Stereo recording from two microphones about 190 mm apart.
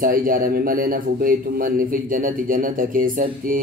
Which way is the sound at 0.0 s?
45° right (ahead or behind).